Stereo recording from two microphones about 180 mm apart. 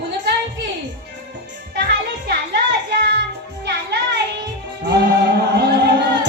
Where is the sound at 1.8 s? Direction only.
65° right (ahead or behind).